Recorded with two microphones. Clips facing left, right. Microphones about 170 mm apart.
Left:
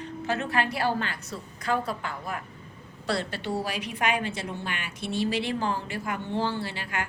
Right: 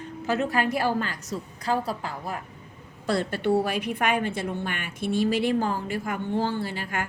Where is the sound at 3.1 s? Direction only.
50° right (ahead or behind).